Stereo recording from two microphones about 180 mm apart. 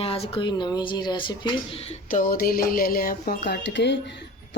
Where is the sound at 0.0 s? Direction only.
35° left (ahead or behind).